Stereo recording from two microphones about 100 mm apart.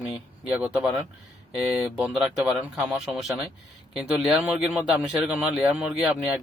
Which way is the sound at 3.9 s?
5° right (ahead or behind).